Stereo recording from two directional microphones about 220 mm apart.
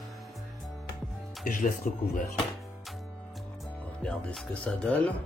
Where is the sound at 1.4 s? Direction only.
40° left (ahead or behind).